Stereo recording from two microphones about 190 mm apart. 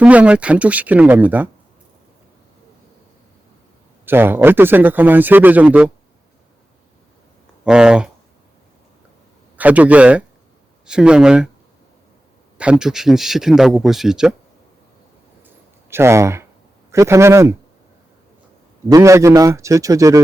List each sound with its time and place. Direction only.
0.0 s speech: 5° right (ahead or behind)
4.0 s speech: 10° right (ahead or behind)
7.6 s speech: 5° right (ahead or behind)
9.6 s a man's voice: 10° right (ahead or behind)
12.5 s a man's voice: 5° right (ahead or behind)
15.4 s a sound: 15° right (ahead or behind)
16.9 s speech: 15° right (ahead or behind)
18.9 s speech: 15° right (ahead or behind)